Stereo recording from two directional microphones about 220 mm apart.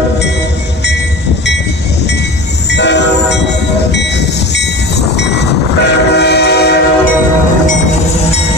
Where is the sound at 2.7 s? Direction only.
50° left (ahead or behind).